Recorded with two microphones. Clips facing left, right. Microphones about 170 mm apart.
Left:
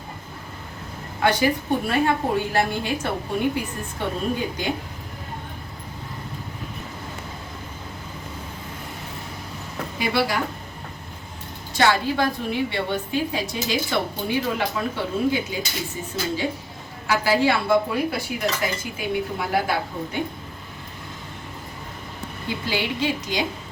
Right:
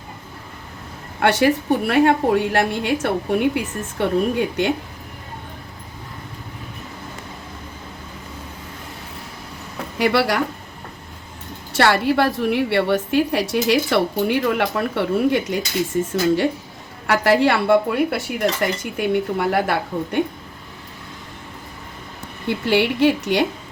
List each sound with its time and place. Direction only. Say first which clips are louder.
1.2 s a woman's voice: right 4 dB; 70° right (ahead or behind)
10.0 s a woman's voice: right 5 dB; 75° right (ahead or behind)
11.7 s a woman's voice: right 4 dB; 70° right (ahead or behind)
22.4 s speech: right 8 dB; 65° right (ahead or behind)